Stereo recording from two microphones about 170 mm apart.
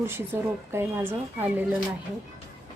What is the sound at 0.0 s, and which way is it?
Speech, 15° right (ahead or behind).